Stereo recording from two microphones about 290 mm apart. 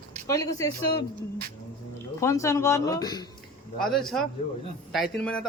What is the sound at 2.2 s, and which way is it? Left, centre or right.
Speech, centre.